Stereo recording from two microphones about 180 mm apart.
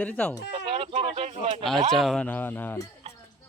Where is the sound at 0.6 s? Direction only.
30° right (ahead or behind).